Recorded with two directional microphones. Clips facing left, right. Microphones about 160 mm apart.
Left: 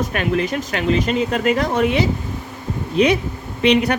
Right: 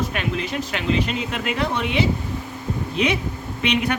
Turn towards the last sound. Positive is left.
turn(degrees=35)  # may be behind; listen again after turning